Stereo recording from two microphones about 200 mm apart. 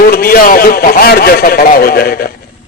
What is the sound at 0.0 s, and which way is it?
A man's voice, 50° left (ahead or behind).